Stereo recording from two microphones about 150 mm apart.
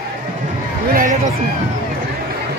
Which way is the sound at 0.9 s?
60° right (ahead or behind).